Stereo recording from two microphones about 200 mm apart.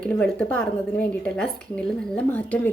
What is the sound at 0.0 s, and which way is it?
A woman's voice, 5° left (ahead or behind).